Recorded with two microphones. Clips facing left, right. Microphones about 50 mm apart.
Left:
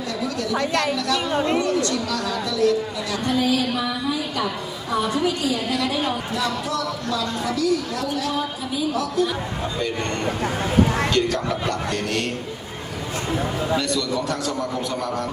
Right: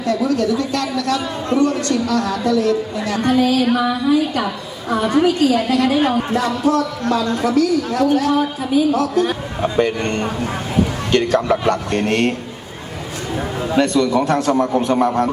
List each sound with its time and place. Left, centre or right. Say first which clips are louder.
0.0 s a woman's voice: right 9 dB; right
0.5 s a woman's voice: right 2 dB; left
1.6 s a woman's voice: right 5 dB; right
9.6 s a woman's voice: right 10 dB; right
13.7 s a woman's voice: right 12 dB; right